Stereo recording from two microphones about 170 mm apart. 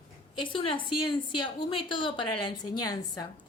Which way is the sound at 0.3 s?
30° left (ahead or behind).